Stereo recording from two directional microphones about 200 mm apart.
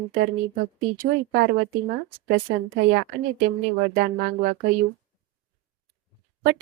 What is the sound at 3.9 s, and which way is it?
Speech, 50° right (ahead or behind).